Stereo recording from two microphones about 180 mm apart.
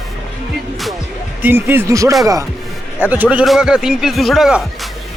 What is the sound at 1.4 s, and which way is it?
A man's voice, 10° right (ahead or behind).